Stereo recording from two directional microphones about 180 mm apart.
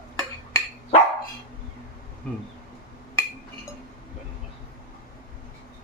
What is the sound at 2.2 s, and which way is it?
Speech, 5° left (ahead or behind).